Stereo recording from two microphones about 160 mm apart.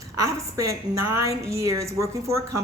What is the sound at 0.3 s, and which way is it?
A woman's voice, 20° right (ahead or behind).